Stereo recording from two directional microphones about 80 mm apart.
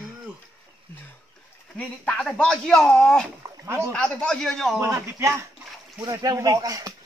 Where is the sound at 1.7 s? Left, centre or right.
Centre.